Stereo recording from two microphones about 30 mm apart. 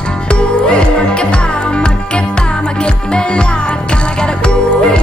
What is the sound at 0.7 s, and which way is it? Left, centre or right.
Music, left.